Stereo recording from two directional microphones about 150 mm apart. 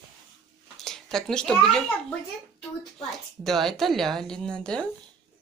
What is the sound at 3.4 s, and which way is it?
Speech, centre (ahead or behind).